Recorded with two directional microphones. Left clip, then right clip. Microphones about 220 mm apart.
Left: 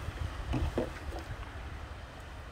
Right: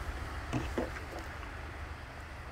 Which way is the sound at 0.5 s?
15° left (ahead or behind).